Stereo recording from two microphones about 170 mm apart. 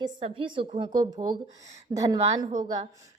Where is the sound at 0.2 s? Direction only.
30° right (ahead or behind).